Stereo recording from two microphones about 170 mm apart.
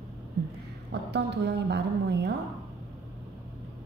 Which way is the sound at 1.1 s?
80° right.